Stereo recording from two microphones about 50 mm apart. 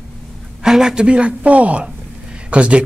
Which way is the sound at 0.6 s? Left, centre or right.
Centre.